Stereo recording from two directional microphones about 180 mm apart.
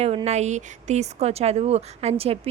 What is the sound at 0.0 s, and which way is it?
A woman's voice, 35° right (ahead or behind).